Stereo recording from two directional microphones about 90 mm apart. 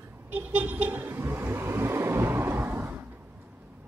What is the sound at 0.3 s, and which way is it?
Vehicle, 20° right (ahead or behind).